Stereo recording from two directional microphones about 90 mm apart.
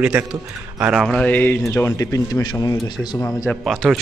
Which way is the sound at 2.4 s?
55° left (ahead or behind).